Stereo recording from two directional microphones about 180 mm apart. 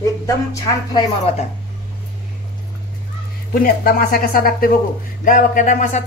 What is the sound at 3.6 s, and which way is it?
A woman's voice, 55° left (ahead or behind).